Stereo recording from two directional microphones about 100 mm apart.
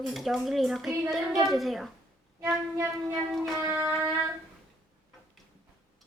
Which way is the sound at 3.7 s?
20° right (ahead or behind).